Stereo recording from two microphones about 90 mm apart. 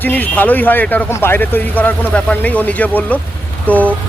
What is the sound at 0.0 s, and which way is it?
Speech, 20° left (ahead or behind).